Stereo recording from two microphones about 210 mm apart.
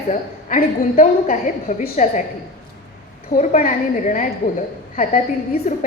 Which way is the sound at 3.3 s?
40° left (ahead or behind).